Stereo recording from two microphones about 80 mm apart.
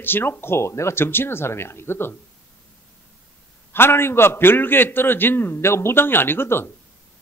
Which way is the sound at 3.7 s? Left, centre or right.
Left.